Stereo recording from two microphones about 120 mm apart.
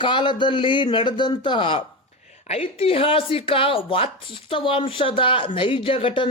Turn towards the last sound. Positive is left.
turn(degrees=50)  # may be behind; listen again after turning